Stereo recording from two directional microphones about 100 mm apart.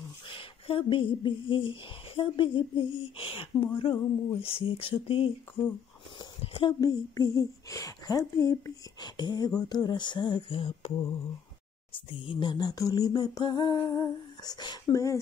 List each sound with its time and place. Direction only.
0.3 s speech: 60° left (ahead or behind)
4.4 s speech: 70° left (ahead or behind)
6.4 s speech: 65° left (ahead or behind)
6.8 s a woman's voice: 35° left (ahead or behind)
9.0 s a sound: 50° left (ahead or behind)
11.9 s a sound: 60° left (ahead or behind); by 14.8 s 40° left (ahead or behind)
14.9 s a woman's voice: 35° left (ahead or behind)